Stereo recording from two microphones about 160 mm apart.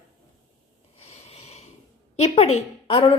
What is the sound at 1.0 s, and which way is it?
Snort, 40° left (ahead or behind).